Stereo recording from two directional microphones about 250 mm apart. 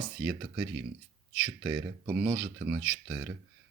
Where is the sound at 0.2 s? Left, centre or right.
Centre.